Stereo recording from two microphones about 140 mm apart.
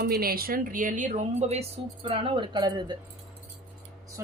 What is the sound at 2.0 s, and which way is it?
Speech, 40° right (ahead or behind).